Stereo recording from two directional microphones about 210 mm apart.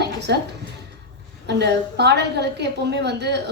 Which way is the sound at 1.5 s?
55° right (ahead or behind).